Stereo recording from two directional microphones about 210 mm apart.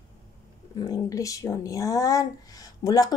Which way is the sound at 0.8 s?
15° left (ahead or behind).